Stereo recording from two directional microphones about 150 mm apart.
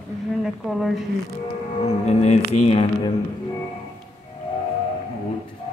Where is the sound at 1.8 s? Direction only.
45° left (ahead or behind).